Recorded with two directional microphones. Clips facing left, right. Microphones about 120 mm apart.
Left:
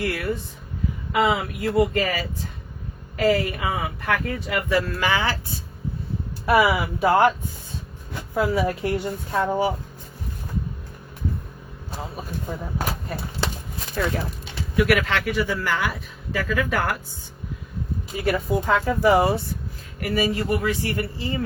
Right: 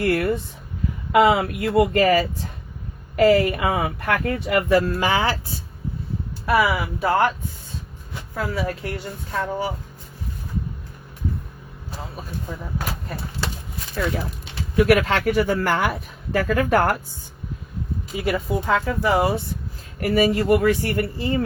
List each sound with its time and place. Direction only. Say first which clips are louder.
0.0 s speech: right 5 dB; 50° right (ahead or behind)
1.1 s speech: right 5 dB; 60° right (ahead or behind)
3.2 s speech: right 5 dB; 45° right (ahead or behind)
4.9 s speech: right 2 dB; 30° right (ahead or behind)
6.4 s speech: left 1 dB; 5° left (ahead or behind)
8.4 s a woman's voice: left 4 dB; 15° left (ahead or behind)
13.9 s speech: even; 5° right (ahead or behind)
14.8 s speech: right 3 dB; 40° right (ahead or behind)
18.3 s speech: even; 5° right (ahead or behind)
20.0 s speech: right 4 dB; 45° right (ahead or behind)